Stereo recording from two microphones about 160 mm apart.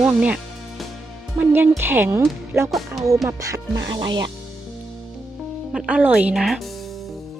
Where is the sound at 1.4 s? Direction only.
10° right (ahead or behind).